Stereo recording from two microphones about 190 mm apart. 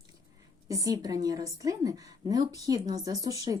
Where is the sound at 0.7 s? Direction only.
20° right (ahead or behind).